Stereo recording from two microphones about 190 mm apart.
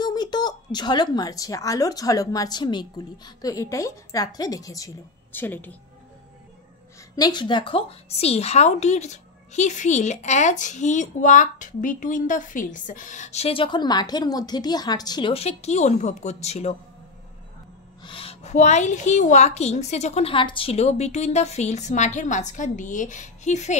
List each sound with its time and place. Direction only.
0.0 s a woman's voice: 20° left (ahead or behind)
7.2 s a woman's voice: 20° left (ahead or behind)
18.0 s a woman's voice: 30° left (ahead or behind)